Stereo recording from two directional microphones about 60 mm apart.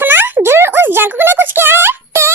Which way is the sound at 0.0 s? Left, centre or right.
Right.